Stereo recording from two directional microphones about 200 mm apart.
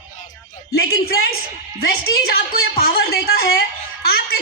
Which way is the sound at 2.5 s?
50° left (ahead or behind).